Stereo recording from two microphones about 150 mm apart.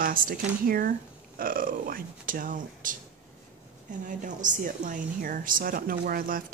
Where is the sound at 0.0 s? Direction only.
70° right (ahead or behind).